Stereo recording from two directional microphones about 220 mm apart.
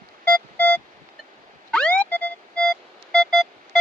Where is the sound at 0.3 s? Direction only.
5° left (ahead or behind).